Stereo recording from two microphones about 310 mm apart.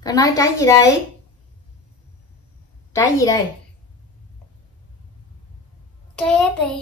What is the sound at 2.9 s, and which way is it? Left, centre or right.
Speech, centre.